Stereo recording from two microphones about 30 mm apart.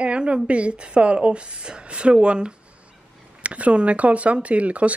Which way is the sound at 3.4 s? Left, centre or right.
Right.